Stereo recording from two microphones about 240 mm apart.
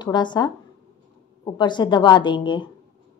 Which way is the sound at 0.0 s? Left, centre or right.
Centre.